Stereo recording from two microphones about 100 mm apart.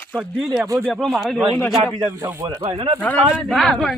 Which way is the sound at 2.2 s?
25° right (ahead or behind).